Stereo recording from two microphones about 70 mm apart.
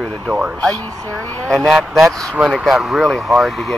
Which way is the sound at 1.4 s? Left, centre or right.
Centre.